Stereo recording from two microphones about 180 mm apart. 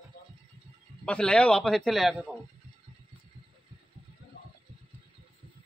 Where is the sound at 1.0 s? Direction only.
5° left (ahead or behind).